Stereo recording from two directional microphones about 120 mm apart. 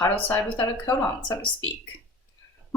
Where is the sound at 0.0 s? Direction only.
15° left (ahead or behind).